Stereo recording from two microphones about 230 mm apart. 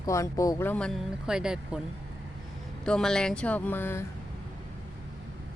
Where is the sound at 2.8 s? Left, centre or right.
Centre.